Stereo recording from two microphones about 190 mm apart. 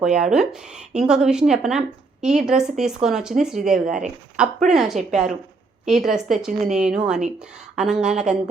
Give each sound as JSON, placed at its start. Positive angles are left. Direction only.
{"t": 0.0, "sound": "a woman's voice", "side_deg": -5}
{"t": 3.8, "sound": "speech", "side_deg": -40}
{"t": 4.4, "sound": "a woman's voice", "side_deg": -5}